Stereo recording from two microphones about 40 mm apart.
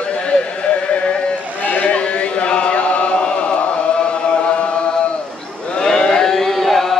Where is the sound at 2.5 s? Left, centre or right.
Left.